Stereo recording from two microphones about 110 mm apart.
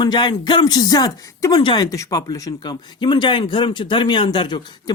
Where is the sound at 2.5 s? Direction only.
45° left (ahead or behind).